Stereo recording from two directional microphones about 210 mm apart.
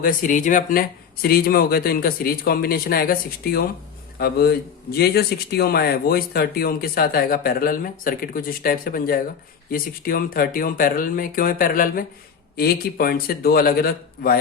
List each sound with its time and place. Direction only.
0.0 s speech: 40° left (ahead or behind)